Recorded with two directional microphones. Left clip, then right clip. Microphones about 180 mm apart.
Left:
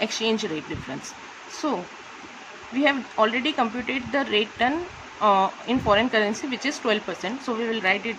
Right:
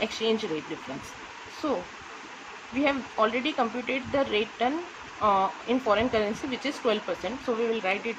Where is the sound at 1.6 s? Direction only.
35° left (ahead or behind).